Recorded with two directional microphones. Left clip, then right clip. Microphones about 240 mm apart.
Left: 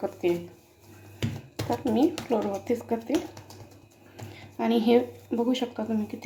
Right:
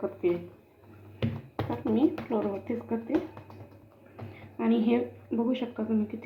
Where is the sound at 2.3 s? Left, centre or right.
Centre.